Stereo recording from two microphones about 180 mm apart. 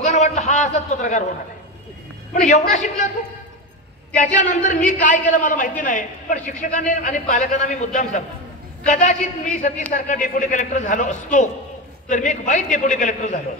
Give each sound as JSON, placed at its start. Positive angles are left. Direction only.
{"t": 0.0, "sound": "a sound", "side_deg": 40}
{"t": 2.4, "sound": "a man's voice", "side_deg": 40}
{"t": 4.2, "sound": "a man's voice", "side_deg": 45}